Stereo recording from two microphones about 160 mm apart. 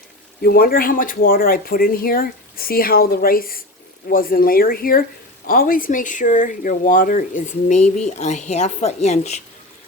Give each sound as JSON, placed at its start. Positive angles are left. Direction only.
{"t": 0.4, "sound": "speech", "side_deg": 70}